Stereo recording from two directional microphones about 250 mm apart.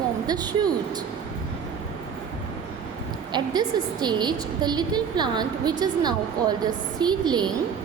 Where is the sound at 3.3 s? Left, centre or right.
Centre.